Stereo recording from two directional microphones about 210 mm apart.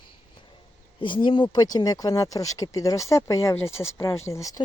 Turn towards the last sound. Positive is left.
turn(degrees=15)  # may be behind; listen again after turning